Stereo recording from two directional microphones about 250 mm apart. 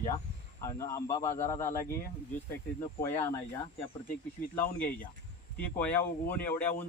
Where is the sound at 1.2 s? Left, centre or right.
Left.